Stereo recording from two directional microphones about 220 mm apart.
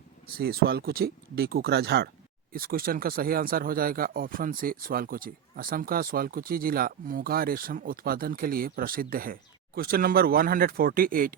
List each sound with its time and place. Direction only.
0.3 s speech: 45° right (ahead or behind)